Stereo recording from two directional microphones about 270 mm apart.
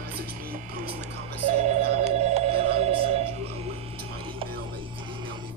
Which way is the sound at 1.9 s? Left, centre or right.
Right.